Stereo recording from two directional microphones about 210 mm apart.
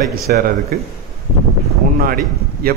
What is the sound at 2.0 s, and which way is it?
Speech, 45° right (ahead or behind).